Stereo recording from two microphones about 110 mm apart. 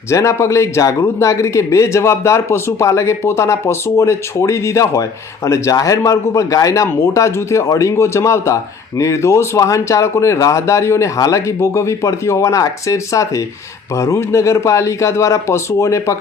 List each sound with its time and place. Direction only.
0.1 s speech: 25° left (ahead or behind)